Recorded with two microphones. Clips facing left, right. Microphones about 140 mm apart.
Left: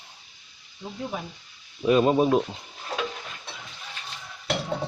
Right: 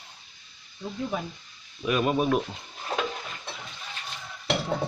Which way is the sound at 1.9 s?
25° left (ahead or behind).